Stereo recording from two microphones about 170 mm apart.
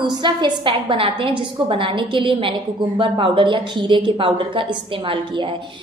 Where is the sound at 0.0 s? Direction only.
25° right (ahead or behind).